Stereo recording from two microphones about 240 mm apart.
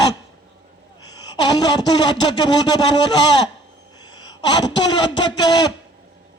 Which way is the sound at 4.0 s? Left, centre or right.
Centre.